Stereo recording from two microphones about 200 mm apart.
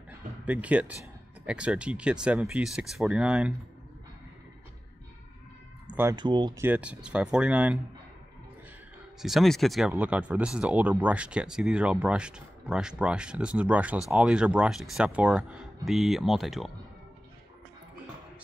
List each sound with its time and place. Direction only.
0.5 s speech: 5° right (ahead or behind)
5.9 s a sound: 10° right (ahead or behind)
6.1 s speech: 20° right (ahead or behind); by 7.8 s 5° right (ahead or behind)
9.2 s speech: centre (ahead or behind)